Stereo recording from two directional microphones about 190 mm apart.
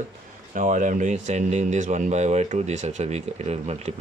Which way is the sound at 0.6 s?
40° right (ahead or behind).